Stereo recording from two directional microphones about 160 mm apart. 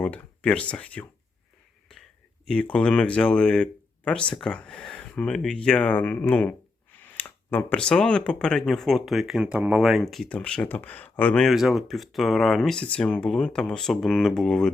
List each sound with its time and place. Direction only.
0.0 s speech: 10° left (ahead or behind)
2.5 s speech: 5° left (ahead or behind)